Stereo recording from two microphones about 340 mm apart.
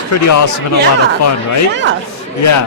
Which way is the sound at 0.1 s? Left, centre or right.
Left.